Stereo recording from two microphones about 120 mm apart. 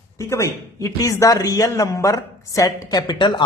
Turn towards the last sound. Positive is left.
turn(degrees=40)  # may be behind; listen again after turning